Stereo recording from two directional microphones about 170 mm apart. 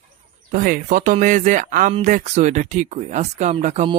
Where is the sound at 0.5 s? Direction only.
50° right (ahead or behind).